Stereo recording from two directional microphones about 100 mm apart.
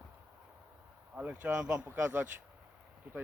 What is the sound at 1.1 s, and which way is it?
Speech, 15° right (ahead or behind).